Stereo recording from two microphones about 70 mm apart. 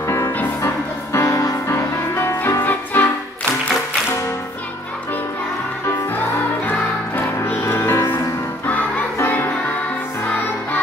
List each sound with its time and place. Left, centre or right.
0.0 s music: left
1.7 s music: left
2.6 s music: left
6.1 s music: left
7.3 s music: left
8.6 s crowd: left